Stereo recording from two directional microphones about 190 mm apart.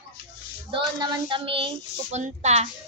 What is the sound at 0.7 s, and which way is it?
Child singing, 25° right (ahead or behind).